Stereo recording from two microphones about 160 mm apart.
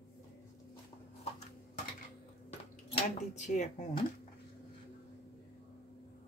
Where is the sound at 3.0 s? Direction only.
45° left (ahead or behind).